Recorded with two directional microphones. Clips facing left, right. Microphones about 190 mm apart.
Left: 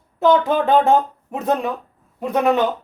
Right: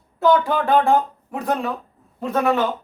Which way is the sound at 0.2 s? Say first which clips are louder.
Left 2 dB; 20° left (ahead or behind).